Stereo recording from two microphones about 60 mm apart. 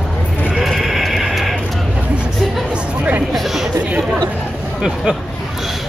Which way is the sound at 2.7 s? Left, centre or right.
Right.